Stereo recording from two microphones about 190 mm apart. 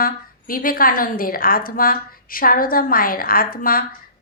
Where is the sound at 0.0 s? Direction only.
50° left (ahead or behind).